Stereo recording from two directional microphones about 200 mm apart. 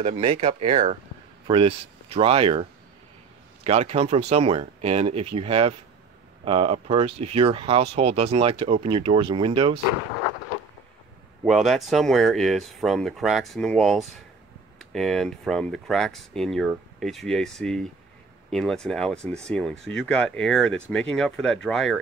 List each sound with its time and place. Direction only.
0.0 s speech: 30° right (ahead or behind)
3.6 s speech: 30° right (ahead or behind)
11.4 s speech: centre (ahead or behind)